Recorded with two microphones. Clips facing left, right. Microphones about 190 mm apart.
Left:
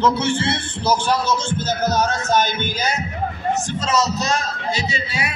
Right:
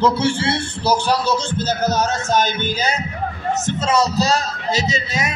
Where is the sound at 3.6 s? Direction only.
25° right (ahead or behind).